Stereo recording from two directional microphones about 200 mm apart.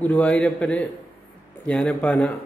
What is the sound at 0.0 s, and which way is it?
A man's voice, 5° left (ahead or behind).